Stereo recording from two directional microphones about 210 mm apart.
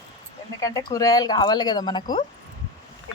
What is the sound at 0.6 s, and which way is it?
Speech, 15° left (ahead or behind).